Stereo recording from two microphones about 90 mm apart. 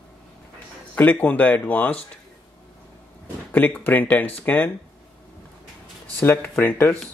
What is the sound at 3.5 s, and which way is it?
Speech, 20° left (ahead or behind).